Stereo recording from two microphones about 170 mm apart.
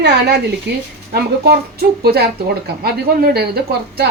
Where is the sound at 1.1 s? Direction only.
65° right (ahead or behind).